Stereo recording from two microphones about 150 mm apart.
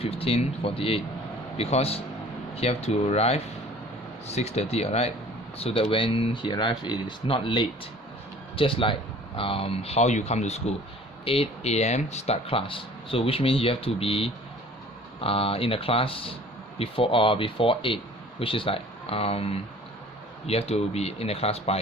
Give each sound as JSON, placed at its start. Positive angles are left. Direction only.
{"t": 0.0, "sound": "speech", "side_deg": 40}